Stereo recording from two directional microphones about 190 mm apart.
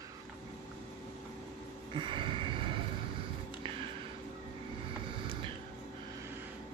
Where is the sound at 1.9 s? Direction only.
25° right (ahead or behind).